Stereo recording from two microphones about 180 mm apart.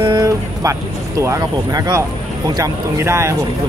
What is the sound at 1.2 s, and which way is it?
Speech, 20° right (ahead or behind).